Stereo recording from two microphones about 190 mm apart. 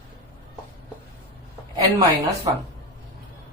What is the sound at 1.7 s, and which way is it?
Speech, 20° right (ahead or behind).